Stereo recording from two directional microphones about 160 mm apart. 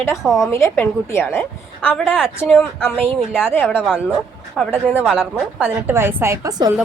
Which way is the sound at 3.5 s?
15° left (ahead or behind).